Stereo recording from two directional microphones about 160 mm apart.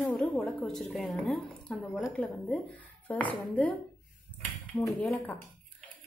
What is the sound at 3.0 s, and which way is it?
Speech, 10° left (ahead or behind).